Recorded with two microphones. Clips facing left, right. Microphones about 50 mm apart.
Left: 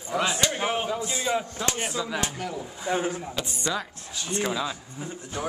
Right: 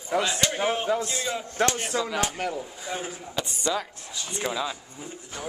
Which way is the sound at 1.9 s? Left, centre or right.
Right.